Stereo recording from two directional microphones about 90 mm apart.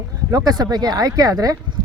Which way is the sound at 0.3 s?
40° right (ahead or behind).